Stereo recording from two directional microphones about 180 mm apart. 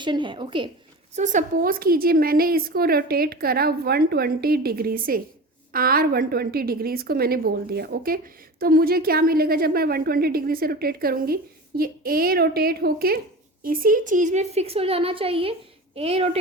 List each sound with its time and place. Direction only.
0.0 s a woman's voice: 25° right (ahead or behind)
1.1 s a woman's voice: 45° right (ahead or behind)